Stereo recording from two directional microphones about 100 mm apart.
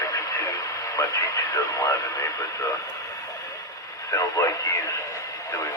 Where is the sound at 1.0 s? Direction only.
35° left (ahead or behind).